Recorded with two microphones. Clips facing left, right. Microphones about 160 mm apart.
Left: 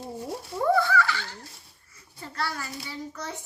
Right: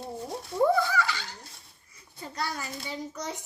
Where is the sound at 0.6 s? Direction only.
15° right (ahead or behind).